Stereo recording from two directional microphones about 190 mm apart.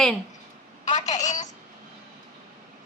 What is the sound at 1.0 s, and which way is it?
Speech, 40° left (ahead or behind).